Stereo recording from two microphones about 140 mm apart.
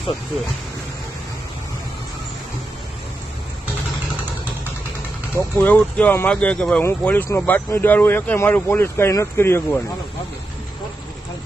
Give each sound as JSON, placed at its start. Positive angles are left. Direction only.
{"t": 5.5, "sound": "speech", "side_deg": 10}